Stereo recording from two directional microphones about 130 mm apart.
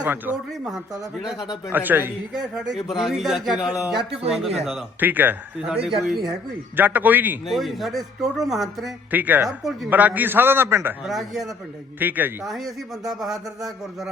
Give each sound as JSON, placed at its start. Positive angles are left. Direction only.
{"t": 0.0, "sound": "a man's voice", "side_deg": -15}
{"t": 1.7, "sound": "a man's voice", "side_deg": -15}
{"t": 2.3, "sound": "speech", "side_deg": -5}
{"t": 4.9, "sound": "a man's voice", "side_deg": -15}
{"t": 7.4, "sound": "speech", "side_deg": 0}
{"t": 9.1, "sound": "a man's voice", "side_deg": -15}
{"t": 11.0, "sound": "speech", "side_deg": 0}
{"t": 11.9, "sound": "a man's voice", "side_deg": -15}
{"t": 12.5, "sound": "speech", "side_deg": 0}